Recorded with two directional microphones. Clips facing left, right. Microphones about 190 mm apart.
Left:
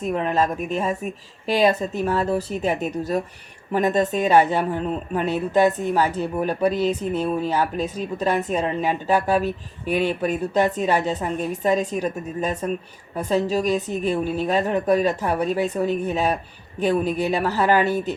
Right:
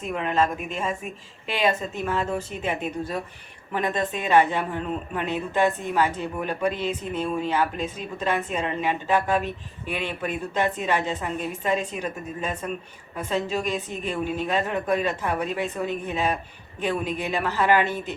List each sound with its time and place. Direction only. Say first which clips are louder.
0.0 s speech: left 3 dB; 40° left (ahead or behind)